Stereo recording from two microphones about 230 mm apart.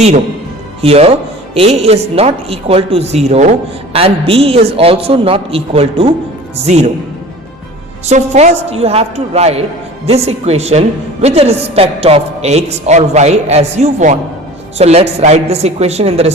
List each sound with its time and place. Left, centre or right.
0.8 s a woman's voice: right
8.0 s a woman's voice: right